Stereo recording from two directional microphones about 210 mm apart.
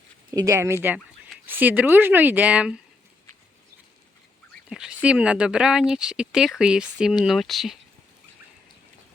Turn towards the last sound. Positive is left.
turn(degrees=0)  # may be behind; listen again after turning